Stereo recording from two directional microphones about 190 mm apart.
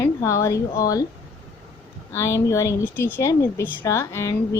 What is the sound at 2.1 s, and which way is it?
A woman's voice, 15° left (ahead or behind).